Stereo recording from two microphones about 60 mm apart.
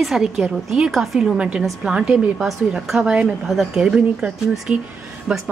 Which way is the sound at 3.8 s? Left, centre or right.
Centre.